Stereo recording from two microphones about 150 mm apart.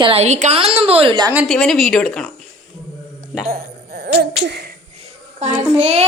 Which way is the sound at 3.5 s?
85° right.